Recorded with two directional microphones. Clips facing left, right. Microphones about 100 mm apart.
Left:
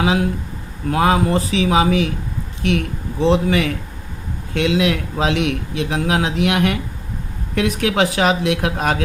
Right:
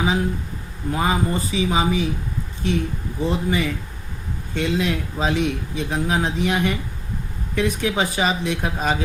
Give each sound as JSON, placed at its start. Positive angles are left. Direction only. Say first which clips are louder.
{"t": 0.0, "sound": "speech", "louder": "left 4 dB", "side_deg": 85}